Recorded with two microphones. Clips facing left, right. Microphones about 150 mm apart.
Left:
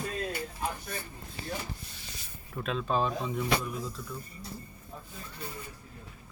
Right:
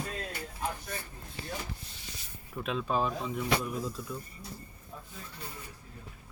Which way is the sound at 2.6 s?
10° right (ahead or behind).